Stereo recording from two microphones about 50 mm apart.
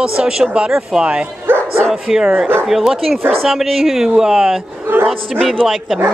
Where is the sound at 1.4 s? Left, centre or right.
Right.